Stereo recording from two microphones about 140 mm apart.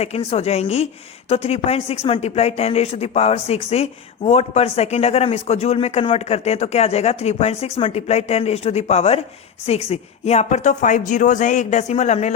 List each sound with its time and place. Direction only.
0.0 s a man's voice: 45° left (ahead or behind)